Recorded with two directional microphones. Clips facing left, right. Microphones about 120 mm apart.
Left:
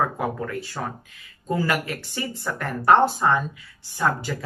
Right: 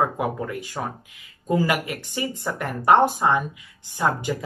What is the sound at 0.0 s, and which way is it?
Speech, 15° right (ahead or behind).